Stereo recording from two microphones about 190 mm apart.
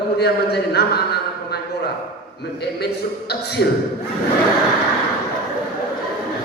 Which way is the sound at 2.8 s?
60° left (ahead or behind).